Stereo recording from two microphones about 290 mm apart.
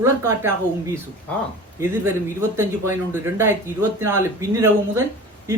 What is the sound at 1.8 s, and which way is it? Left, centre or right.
Speech, centre.